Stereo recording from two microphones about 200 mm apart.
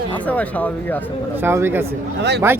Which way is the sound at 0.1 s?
10° left (ahead or behind).